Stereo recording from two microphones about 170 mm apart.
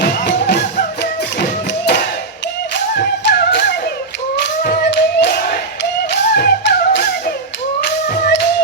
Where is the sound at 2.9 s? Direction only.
75° left (ahead or behind).